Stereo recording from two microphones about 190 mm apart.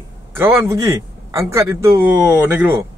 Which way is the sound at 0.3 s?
10° right (ahead or behind).